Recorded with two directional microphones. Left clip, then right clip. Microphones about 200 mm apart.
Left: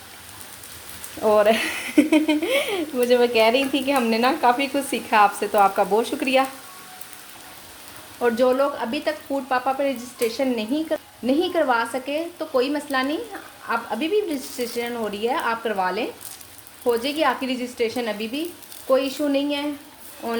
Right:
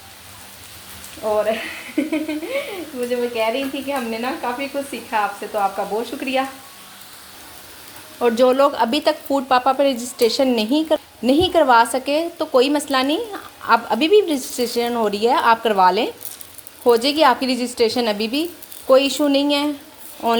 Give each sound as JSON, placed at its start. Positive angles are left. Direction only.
{"t": 1.4, "sound": "speech", "side_deg": 45}
{"t": 6.1, "sound": "speech", "side_deg": 20}
{"t": 8.2, "sound": "a woman's voice", "side_deg": -30}